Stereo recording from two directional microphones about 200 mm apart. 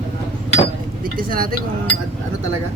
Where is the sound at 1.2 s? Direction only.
45° right (ahead or behind).